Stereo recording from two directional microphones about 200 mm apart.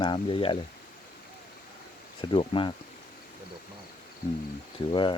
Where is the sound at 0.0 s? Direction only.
25° left (ahead or behind).